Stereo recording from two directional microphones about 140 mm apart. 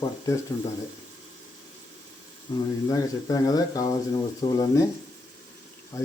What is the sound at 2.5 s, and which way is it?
Speech, 30° left (ahead or behind).